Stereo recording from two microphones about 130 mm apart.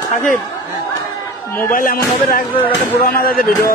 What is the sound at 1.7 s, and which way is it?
Speech, 90° left.